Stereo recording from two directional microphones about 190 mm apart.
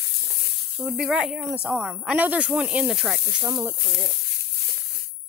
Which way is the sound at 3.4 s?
20° right (ahead or behind).